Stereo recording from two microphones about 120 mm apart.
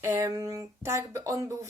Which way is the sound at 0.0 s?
25° right (ahead or behind).